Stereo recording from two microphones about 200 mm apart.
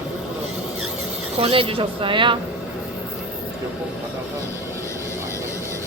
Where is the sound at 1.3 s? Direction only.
30° right (ahead or behind).